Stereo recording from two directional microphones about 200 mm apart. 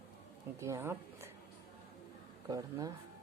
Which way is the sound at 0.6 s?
15° right (ahead or behind).